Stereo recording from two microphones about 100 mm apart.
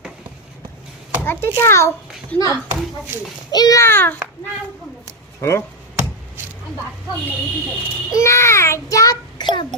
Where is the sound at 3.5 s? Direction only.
45° left (ahead or behind).